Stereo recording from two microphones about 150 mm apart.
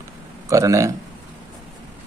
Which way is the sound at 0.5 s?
20° right (ahead or behind).